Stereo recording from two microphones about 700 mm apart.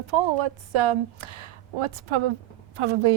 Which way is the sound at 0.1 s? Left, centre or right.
Right.